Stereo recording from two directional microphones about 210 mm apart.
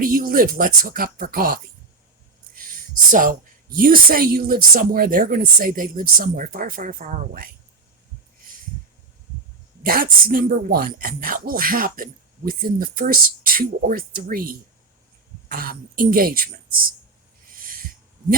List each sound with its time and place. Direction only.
0.0 s speech: 40° right (ahead or behind)
3.1 s speech: 40° right (ahead or behind)
9.8 s speech: 45° right (ahead or behind)
17.5 s owl: 40° right (ahead or behind)